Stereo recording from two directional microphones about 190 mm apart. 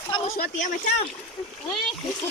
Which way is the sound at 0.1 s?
40° left (ahead or behind).